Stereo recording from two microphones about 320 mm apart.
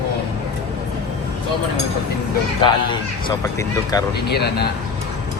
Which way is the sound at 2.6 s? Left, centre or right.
Centre.